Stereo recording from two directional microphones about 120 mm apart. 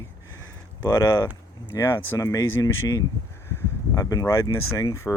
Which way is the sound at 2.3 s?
30° left (ahead or behind).